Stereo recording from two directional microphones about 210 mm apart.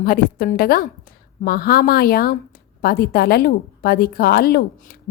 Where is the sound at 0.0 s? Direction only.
45° left (ahead or behind).